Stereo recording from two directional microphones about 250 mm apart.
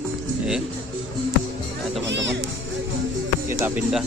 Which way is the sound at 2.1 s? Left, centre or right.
Right.